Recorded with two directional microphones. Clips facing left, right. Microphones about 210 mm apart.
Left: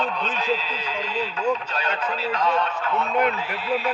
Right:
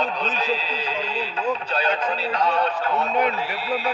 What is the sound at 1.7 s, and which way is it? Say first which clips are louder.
Speech: right 3 dB; 35° right (ahead or behind).